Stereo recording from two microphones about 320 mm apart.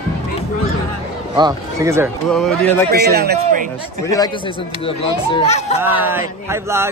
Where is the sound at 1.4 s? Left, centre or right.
Centre.